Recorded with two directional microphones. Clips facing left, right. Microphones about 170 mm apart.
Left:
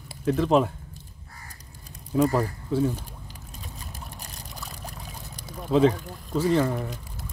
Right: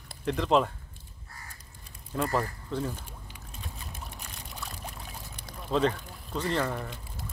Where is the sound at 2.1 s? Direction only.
5° left (ahead or behind).